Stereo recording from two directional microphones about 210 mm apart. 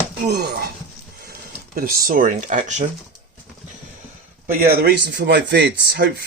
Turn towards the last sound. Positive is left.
turn(degrees=-55)  # may be behind; listen again after turning